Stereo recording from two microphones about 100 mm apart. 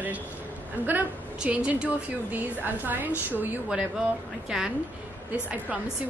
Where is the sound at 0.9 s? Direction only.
15° right (ahead or behind).